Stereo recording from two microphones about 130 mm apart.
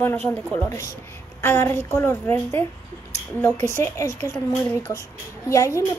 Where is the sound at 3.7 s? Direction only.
20° left (ahead or behind).